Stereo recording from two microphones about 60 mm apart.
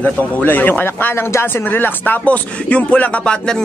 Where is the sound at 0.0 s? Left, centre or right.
Left.